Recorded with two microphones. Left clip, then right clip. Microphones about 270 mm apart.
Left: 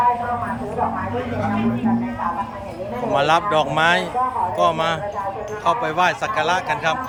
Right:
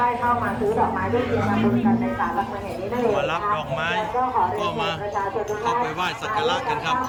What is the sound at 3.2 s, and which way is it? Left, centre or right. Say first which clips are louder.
A man's voice: left 6 dB; left.